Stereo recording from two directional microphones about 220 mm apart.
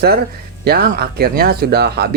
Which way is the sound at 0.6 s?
45° right (ahead or behind).